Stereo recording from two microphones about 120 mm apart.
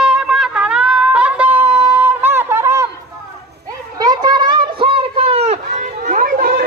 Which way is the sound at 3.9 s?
35° right (ahead or behind).